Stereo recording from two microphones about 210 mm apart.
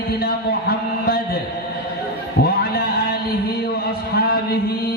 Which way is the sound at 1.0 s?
45° left (ahead or behind).